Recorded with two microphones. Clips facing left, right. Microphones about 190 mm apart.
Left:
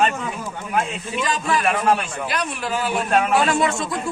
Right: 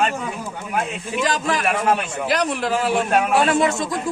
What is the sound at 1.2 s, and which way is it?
A man's voice, 90° right.